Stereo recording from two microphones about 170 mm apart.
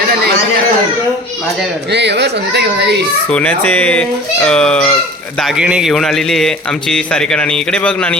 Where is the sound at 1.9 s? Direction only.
85° right.